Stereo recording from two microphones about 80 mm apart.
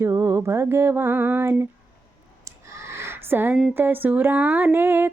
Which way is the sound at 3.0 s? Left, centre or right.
Right.